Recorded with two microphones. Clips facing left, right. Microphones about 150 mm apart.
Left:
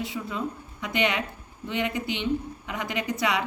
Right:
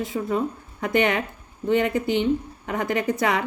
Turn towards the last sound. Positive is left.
turn(degrees=-50)  # may be behind; listen again after turning